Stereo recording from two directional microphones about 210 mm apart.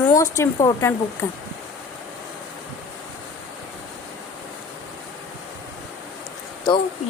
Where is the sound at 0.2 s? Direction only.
15° left (ahead or behind).